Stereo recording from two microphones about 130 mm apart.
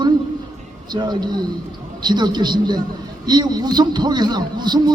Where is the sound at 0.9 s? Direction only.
35° right (ahead or behind).